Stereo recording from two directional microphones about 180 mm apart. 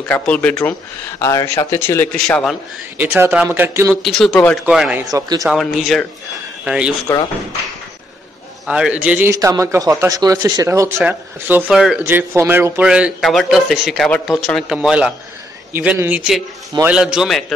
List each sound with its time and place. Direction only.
0.1 s speech: 5° left (ahead or behind)
3.0 s a man's voice: 10° right (ahead or behind)
4.0 s a man's voice: centre (ahead or behind)
4.6 s a man's voice: 5° right (ahead or behind)
7.1 s speech: 15° left (ahead or behind)
8.6 s a man's voice: 5° right (ahead or behind)